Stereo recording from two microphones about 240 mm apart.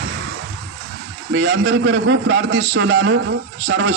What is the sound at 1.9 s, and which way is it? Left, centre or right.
A man's voice, right.